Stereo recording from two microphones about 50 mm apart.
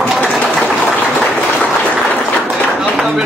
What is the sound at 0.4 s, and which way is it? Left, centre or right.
Engine, left.